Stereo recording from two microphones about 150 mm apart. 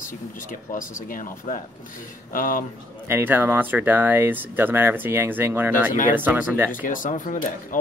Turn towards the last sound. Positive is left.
turn(degrees=60)  # may be behind; listen again after turning